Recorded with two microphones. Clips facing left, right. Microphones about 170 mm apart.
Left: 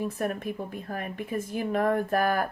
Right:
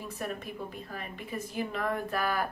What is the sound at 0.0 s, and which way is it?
A woman's voice, 55° left (ahead or behind).